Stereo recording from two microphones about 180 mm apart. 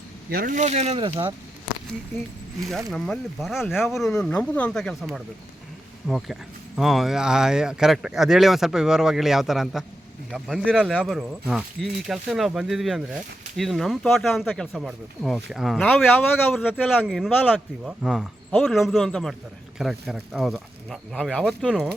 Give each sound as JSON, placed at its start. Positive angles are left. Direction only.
{"t": 0.3, "sound": "speech", "side_deg": -50}
{"t": 2.9, "sound": "speech", "side_deg": 0}